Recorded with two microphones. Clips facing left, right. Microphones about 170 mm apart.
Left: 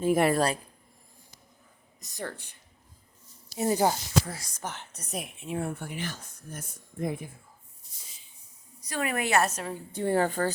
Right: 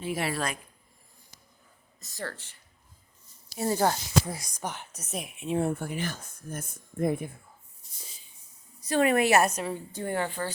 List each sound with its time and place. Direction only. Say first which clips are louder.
0.0 s speech: left 8 dB; 50° left (ahead or behind)
2.0 s speech: left 1 dB; 15° left (ahead or behind)
4.3 s speech: right 2 dB; 15° right (ahead or behind)
4.9 s a woman's voice: even; centre (ahead or behind)
5.4 s a woman's voice: right 6 dB; 25° right (ahead or behind)
5.7 s speech: right 3 dB; 45° right (ahead or behind)
8.8 s a woman's voice: right 7 dB; 25° right (ahead or behind)
9.5 s speech: right 3 dB; 10° right (ahead or behind)
10.0 s a woman's voice: left 6 dB; 35° left (ahead or behind)